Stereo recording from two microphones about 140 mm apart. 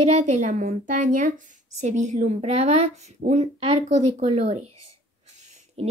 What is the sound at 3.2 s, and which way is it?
Speech, 80° right.